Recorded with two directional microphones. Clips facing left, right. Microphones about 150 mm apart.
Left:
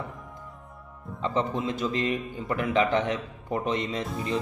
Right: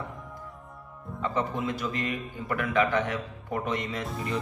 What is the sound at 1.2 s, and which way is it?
Speech, 20° left (ahead or behind).